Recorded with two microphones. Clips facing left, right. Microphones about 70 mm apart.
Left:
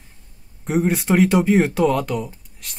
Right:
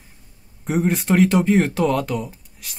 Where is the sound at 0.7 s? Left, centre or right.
Centre.